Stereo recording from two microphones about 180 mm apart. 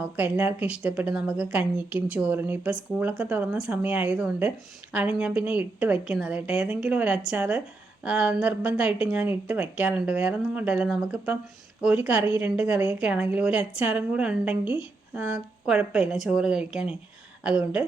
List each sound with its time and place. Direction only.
0.2 s a woman's voice: 10° right (ahead or behind)